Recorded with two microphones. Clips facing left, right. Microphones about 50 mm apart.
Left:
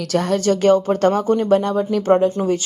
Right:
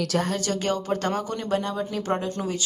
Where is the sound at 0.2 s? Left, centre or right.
Left.